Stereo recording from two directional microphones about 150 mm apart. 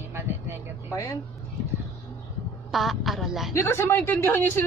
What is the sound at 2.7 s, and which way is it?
Speech, centre (ahead or behind).